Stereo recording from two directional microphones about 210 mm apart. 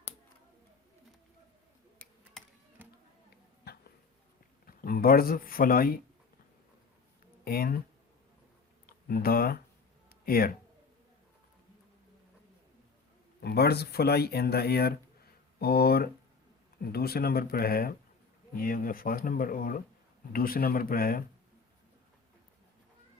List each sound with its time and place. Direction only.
3.6 s a sound: 50° left (ahead or behind)
4.6 s speech: 45° left (ahead or behind)
7.4 s speech: 45° left (ahead or behind)
9.0 s speech: 45° left (ahead or behind)
13.4 s speech: 50° left (ahead or behind)